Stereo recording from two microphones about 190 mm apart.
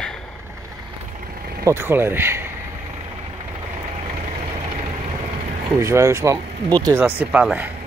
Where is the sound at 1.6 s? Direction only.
10° right (ahead or behind).